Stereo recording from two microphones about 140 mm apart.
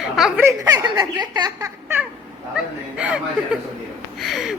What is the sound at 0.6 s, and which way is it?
Speech, 30° right (ahead or behind).